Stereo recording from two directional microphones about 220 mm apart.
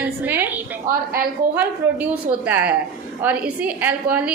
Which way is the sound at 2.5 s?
5° right (ahead or behind).